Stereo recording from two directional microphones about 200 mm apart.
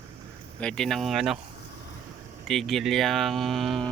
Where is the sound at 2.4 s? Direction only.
Centre (ahead or behind).